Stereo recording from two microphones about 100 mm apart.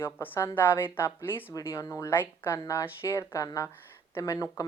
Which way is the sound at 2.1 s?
20° left (ahead or behind).